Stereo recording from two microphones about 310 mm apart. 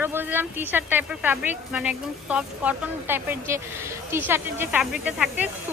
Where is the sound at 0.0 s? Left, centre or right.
Centre.